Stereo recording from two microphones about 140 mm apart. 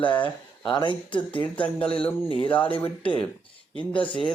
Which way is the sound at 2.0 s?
10° left (ahead or behind).